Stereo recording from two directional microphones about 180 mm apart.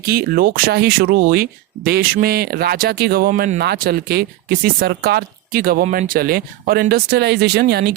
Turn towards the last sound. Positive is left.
turn(degrees=-60)  # may be behind; listen again after turning